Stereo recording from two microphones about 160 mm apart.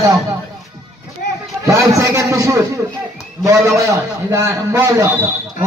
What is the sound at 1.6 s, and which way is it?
A man's voice, 20° right (ahead or behind).